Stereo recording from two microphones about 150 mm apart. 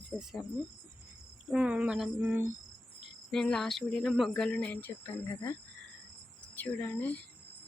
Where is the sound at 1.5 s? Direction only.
10° right (ahead or behind).